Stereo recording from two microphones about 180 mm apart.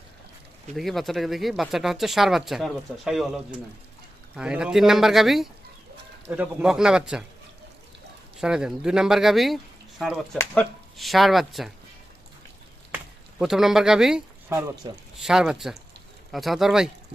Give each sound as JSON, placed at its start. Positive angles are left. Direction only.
{"t": 0.8, "sound": "speech", "side_deg": 0}
{"t": 8.4, "sound": "speech", "side_deg": -5}
{"t": 13.4, "sound": "speech", "side_deg": 0}
{"t": 14.8, "sound": "speech", "side_deg": -25}
{"t": 15.2, "sound": "speech", "side_deg": 0}